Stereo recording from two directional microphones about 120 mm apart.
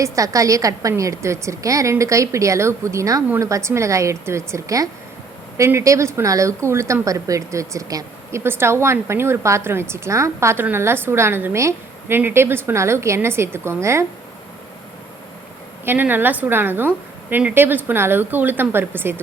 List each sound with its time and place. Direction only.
0.0 s a woman's voice: 25° right (ahead or behind)
15.8 s a woman's voice: 15° right (ahead or behind)